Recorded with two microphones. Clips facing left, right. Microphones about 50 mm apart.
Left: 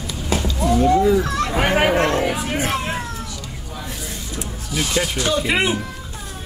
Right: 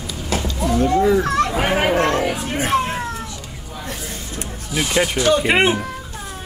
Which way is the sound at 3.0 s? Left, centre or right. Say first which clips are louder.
Right 3 dB; right.